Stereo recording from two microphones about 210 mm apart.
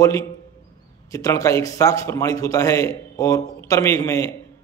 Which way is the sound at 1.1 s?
15° left (ahead or behind).